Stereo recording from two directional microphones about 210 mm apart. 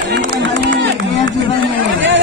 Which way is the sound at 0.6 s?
55° right (ahead or behind).